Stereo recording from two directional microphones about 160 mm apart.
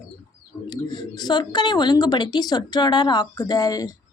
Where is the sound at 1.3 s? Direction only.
25° left (ahead or behind).